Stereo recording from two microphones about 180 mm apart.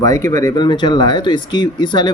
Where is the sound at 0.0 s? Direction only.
20° left (ahead or behind).